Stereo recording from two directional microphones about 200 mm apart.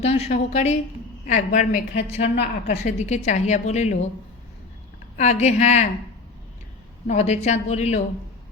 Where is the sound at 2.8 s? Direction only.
35° left (ahead or behind).